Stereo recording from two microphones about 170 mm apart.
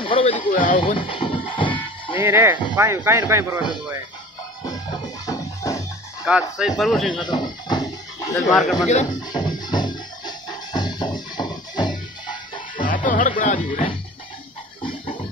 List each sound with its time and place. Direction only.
0.0 s speech: 30° left (ahead or behind)
0.5 s speech: 50° left (ahead or behind)
0.7 s speech: 30° left (ahead or behind)
1.5 s music: 30° left (ahead or behind)
2.1 s speech: 15° right (ahead or behind)
5.2 s music: 20° left (ahead or behind)
6.2 s speech: 5° right (ahead or behind)
7.1 s music: 25° left (ahead or behind)
8.5 s speech: centre (ahead or behind)
9.3 s music: 25° left (ahead or behind)
12.7 s music: 50° left (ahead or behind)
13.4 s speech: 40° left (ahead or behind)